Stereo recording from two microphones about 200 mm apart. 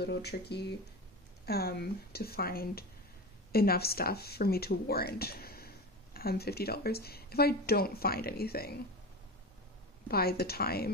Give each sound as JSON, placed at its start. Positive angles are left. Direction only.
{"t": 0.0, "sound": "speech", "side_deg": 55}
{"t": 10.0, "sound": "speech", "side_deg": 50}